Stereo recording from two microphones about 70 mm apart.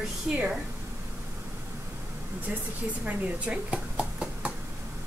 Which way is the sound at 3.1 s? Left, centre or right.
Centre.